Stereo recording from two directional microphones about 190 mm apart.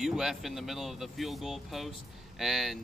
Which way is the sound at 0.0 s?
Centre (ahead or behind).